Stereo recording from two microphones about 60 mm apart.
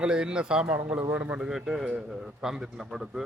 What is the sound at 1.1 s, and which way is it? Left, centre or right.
Speech, right.